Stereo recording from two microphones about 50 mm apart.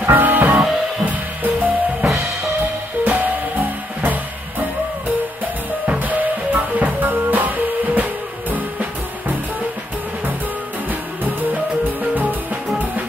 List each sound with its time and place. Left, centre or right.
0.0 s music: right
1.0 s drum: right
3.0 s music: right
5.9 s music: right
10.9 s music: right